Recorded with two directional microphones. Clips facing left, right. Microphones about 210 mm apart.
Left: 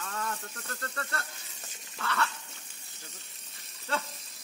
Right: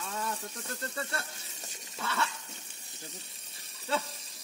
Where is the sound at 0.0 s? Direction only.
10° right (ahead or behind).